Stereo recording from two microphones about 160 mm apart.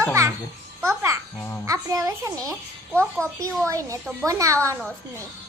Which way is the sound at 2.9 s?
5° left (ahead or behind).